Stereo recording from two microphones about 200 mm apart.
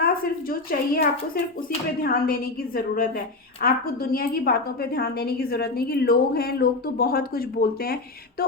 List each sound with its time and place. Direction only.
0.0 s a woman's voice: 45° left (ahead or behind)